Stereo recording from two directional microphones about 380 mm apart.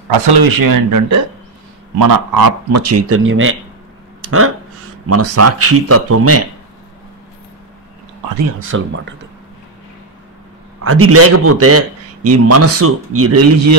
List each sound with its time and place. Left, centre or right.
0.3 s speech: right
5.0 s a man's voice: right
8.5 s a man's voice: right
10.8 s a man's voice: right